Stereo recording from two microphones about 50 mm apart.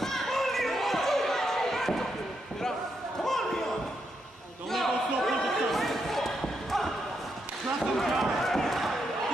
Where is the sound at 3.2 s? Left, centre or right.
Centre.